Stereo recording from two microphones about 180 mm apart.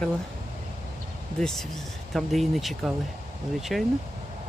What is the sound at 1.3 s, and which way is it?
Speech, 5° left (ahead or behind).